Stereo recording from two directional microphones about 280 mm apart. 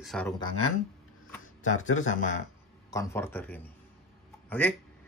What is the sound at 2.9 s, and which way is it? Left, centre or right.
Speech, centre.